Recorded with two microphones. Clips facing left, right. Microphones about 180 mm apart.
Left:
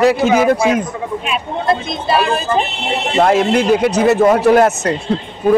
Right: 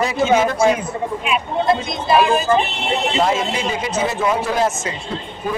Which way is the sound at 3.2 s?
65° left (ahead or behind).